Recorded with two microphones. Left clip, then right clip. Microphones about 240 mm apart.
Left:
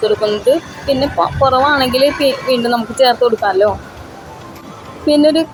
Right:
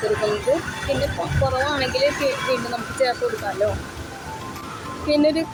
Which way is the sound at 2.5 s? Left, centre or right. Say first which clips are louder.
Left 8 dB; centre.